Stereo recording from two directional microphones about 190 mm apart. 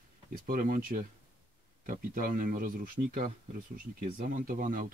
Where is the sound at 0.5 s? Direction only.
45° right (ahead or behind).